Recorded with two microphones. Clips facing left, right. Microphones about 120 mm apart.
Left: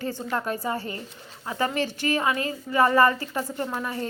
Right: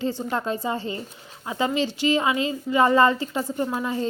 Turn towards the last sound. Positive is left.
turn(degrees=-15)  # may be behind; listen again after turning